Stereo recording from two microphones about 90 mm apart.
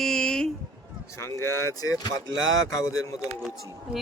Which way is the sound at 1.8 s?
45° left (ahead or behind).